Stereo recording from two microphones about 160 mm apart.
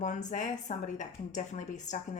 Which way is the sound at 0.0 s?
50° left (ahead or behind).